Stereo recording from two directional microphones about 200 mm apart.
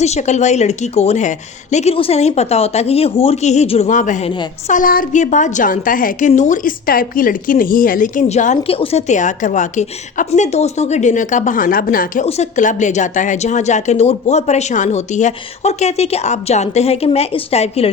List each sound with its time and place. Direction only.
0.0 s a woman's voice: 35° left (ahead or behind)